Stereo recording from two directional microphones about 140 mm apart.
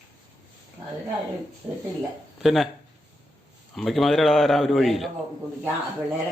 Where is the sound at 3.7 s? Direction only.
Centre (ahead or behind).